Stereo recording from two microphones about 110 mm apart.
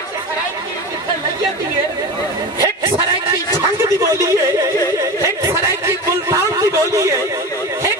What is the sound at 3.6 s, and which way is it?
A man's voice, 25° right (ahead or behind).